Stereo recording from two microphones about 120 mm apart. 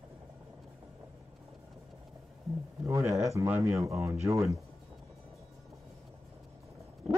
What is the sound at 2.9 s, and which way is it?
Speech, 25° right (ahead or behind).